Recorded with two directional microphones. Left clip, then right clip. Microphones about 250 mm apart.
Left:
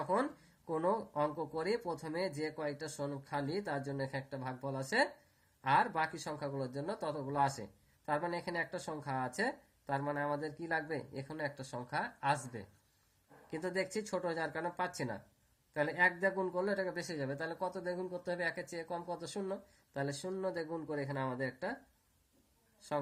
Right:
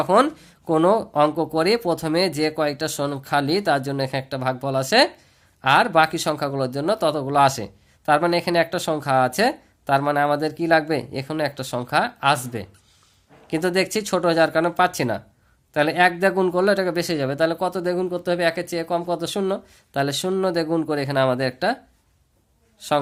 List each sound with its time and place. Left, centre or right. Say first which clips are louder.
0.0 s speech: right 17 dB; right